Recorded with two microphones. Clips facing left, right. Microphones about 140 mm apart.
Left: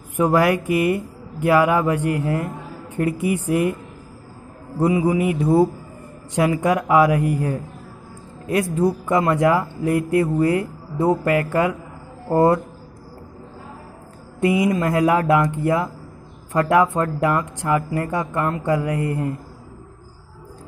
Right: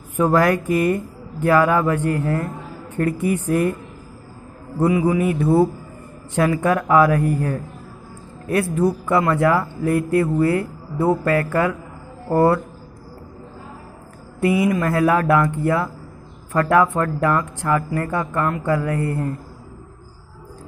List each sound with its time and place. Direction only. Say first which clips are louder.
0.1 s a woman's voice: even; 15° left (ahead or behind)
4.7 s speech: right 1 dB; 20° left (ahead or behind)
14.4 s speech: even; 20° left (ahead or behind)